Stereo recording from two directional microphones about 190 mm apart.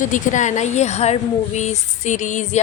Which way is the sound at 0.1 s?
40° left (ahead or behind).